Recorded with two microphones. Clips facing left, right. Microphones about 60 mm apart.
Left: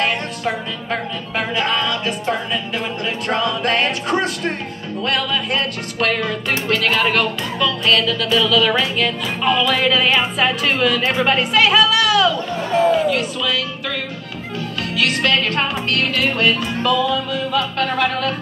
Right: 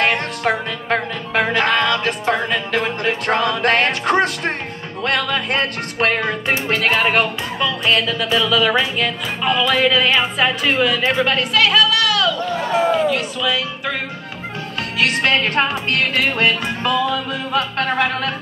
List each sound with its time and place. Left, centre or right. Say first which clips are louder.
0.0 s music: right 2 dB; right
6.0 s music: right 1 dB; right
6.7 s music: even; right
9.4 s speech: right 1 dB; centre
11.1 s speech: even; centre
13.1 s speech: even; centre
15.0 s music: right 1 dB; right
17.9 s speech: even; centre